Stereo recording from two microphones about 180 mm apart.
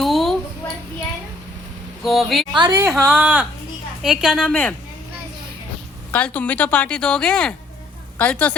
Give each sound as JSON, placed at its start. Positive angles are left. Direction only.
{"t": 0.0, "sound": "a sound", "side_deg": 0}
{"t": 2.0, "sound": "speech", "side_deg": 0}
{"t": 2.5, "sound": "a woman's voice", "side_deg": -20}
{"t": 4.4, "sound": "speech", "side_deg": 10}
{"t": 6.1, "sound": "speech", "side_deg": 5}